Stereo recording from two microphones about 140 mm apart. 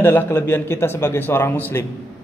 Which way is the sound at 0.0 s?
15° left (ahead or behind).